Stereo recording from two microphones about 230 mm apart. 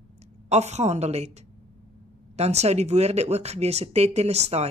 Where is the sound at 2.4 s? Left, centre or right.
Right.